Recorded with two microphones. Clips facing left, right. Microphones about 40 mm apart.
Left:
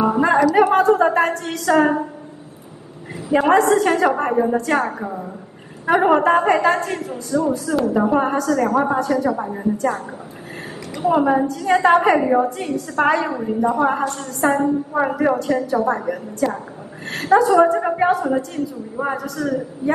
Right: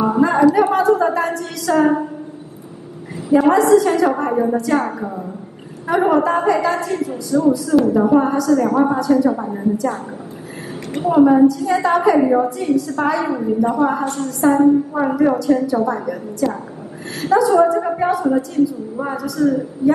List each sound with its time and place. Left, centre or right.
0.2 s music: left
0.6 s a sound: left
3.3 s a woman's voice: left
11.1 s a woman's voice: left